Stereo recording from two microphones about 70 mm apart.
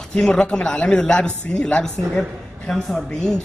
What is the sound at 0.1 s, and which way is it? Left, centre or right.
A man's voice, centre.